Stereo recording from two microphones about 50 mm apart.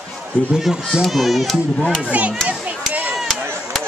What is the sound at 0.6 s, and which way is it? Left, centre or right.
A child's voice, centre.